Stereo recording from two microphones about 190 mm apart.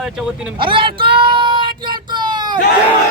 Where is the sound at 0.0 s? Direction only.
5° right (ahead or behind).